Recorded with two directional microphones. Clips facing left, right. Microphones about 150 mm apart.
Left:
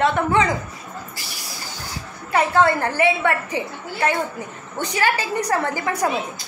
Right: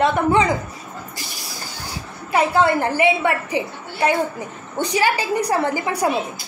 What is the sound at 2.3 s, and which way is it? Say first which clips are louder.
A woman's voice: right 1 dB; 15° right (ahead or behind).